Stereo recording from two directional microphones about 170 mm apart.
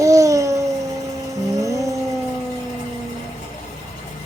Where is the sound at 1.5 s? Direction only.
20° right (ahead or behind).